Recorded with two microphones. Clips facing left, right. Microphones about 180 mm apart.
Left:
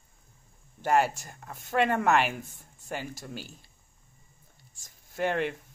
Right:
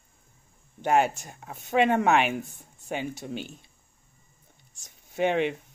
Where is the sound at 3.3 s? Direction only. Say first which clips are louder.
Right 6 dB; 60° right (ahead or behind).